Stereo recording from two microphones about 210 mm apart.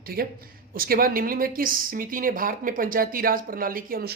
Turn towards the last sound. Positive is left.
turn(degrees=-45)  # may be behind; listen again after turning